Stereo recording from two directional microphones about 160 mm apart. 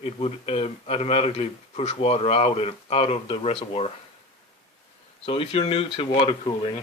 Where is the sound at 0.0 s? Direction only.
40° left (ahead or behind).